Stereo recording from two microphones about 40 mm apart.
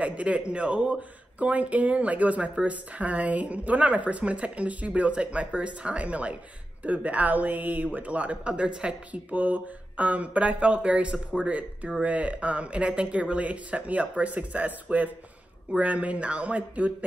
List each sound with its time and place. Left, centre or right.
0.0 s speech: right
9.1 s speech: right